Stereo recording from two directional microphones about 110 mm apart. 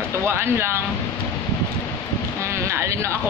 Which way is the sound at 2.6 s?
25° right (ahead or behind).